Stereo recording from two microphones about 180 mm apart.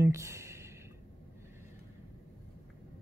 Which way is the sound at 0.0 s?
15° right (ahead or behind).